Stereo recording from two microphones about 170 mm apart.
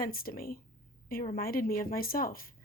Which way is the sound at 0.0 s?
60° left (ahead or behind).